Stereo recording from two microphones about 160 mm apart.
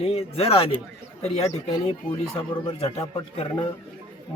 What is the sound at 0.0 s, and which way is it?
Speech, 40° left (ahead or behind).